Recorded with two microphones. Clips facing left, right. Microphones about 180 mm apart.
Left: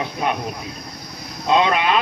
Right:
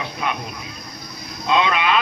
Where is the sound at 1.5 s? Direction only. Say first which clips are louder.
Left 2 dB; 45° left (ahead or behind).